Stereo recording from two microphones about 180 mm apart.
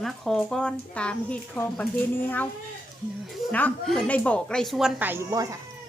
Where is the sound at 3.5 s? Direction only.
10° left (ahead or behind); by 5.6 s 20° right (ahead or behind).